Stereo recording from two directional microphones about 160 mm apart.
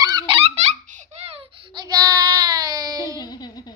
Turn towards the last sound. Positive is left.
turn(degrees=25)  # may be behind; listen again after turning